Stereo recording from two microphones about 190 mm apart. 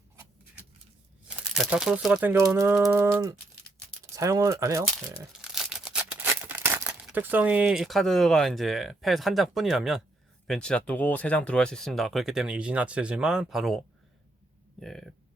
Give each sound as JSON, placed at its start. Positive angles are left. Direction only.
{"t": 1.4, "sound": "speech", "side_deg": -5}
{"t": 5.4, "sound": "speech", "side_deg": 0}